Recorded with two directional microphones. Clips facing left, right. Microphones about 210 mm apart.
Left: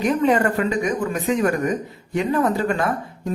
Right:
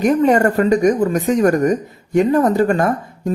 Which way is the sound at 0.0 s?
45° right (ahead or behind).